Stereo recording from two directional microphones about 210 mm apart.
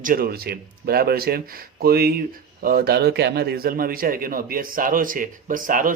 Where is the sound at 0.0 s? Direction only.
45° right (ahead or behind).